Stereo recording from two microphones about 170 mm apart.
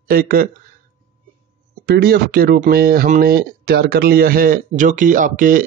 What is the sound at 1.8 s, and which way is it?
Speech, 65° right (ahead or behind).